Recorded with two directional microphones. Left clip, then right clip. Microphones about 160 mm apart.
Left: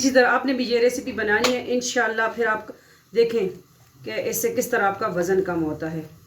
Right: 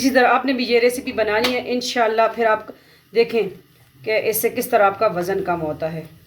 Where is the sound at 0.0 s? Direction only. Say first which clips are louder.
Right 2 dB; 65° right (ahead or behind).